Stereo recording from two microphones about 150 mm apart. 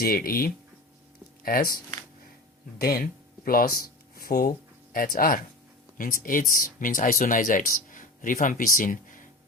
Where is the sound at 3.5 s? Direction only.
75° left (ahead or behind).